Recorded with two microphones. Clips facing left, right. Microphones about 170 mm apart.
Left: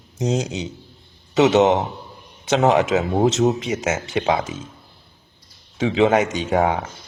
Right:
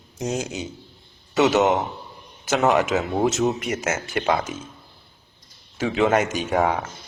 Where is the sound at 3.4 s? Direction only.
40° left (ahead or behind).